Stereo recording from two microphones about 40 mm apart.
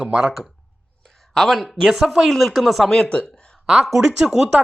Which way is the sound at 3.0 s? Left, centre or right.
Left.